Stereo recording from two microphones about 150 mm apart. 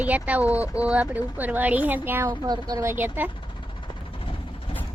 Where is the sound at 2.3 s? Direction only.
25° right (ahead or behind).